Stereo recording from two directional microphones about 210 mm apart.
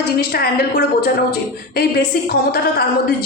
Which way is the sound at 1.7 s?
45° left (ahead or behind).